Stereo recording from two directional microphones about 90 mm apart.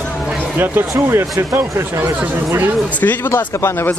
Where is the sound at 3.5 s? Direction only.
30° left (ahead or behind).